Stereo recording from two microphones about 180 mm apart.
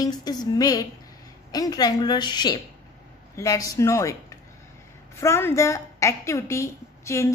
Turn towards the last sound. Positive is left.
turn(degrees=15)  # may be behind; listen again after turning